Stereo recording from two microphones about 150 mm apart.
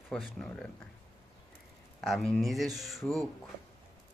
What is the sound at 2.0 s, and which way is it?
A man's voice, centre (ahead or behind).